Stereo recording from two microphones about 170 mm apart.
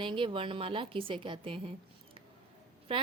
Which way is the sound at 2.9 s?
30° right (ahead or behind).